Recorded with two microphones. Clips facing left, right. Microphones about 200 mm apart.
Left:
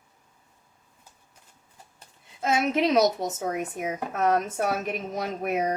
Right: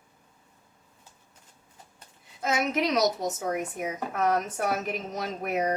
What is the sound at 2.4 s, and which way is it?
A woman's voice, 25° left (ahead or behind).